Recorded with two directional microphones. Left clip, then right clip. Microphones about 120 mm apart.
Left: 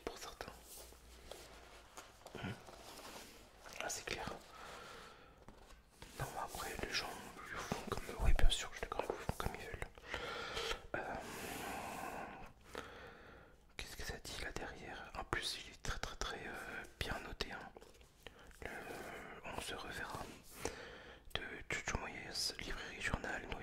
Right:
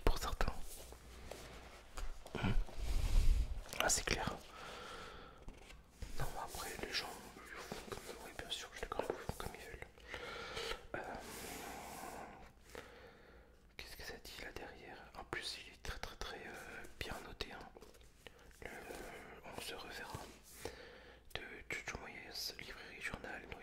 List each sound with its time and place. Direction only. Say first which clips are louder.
0.0 s whispering: right 8 dB; 45° right (ahead or behind)
2.3 s a sound: right 6 dB; 40° right (ahead or behind)
3.8 s whispering: right 8 dB; 35° right (ahead or behind)
6.1 s whispering: left 1 dB; 10° left (ahead or behind)
7.5 s whispering: left 5 dB; 40° left (ahead or behind)
8.6 s whispering: even; 10° left (ahead or behind)
9.5 s gasp: left 4 dB; 30° left (ahead or behind)
13.7 s whispering: left 2 dB; 30° left (ahead or behind)